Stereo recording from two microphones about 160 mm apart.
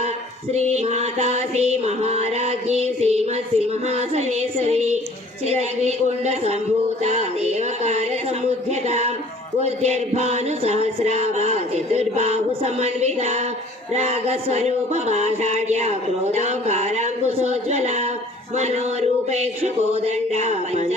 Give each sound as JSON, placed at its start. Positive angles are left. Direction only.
{"t": 0.5, "sound": "music", "side_deg": -45}